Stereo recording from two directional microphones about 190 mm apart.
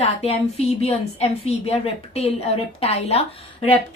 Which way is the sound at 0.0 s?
30° left (ahead or behind).